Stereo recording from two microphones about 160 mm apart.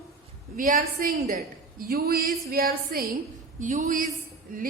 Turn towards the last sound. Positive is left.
turn(degrees=-60)  # may be behind; listen again after turning